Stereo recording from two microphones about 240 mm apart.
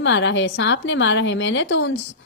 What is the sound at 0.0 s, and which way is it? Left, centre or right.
A woman's voice, left.